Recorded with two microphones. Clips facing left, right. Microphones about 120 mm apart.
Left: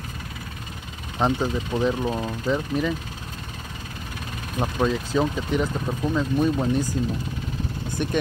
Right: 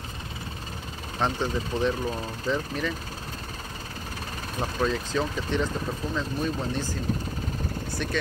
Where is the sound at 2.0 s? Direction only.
25° left (ahead or behind).